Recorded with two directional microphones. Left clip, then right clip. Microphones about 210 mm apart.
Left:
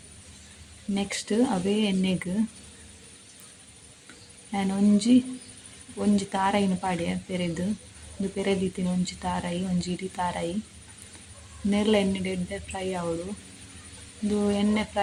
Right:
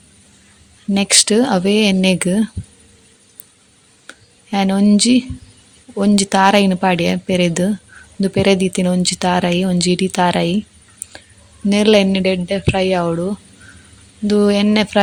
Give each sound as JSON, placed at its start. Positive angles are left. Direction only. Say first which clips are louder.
{"t": 0.9, "sound": "speech", "louder": "right 14 dB", "side_deg": -50}
{"t": 4.5, "sound": "speech", "louder": "right 11 dB", "side_deg": -50}
{"t": 11.7, "sound": "speech", "louder": "right 12 dB", "side_deg": -45}
{"t": 14.3, "sound": "speech", "louder": "right 13 dB", "side_deg": -50}